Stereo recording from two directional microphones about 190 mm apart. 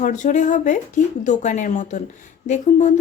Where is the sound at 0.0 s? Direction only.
40° left (ahead or behind).